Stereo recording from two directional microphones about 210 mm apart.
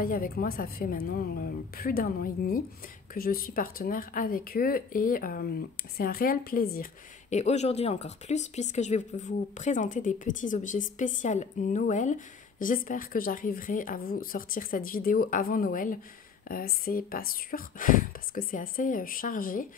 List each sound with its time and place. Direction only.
0.0 s a woman's voice: 40° left (ahead or behind)